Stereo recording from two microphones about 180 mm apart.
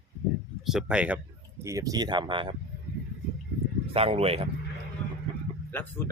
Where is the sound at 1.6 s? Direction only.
15° right (ahead or behind).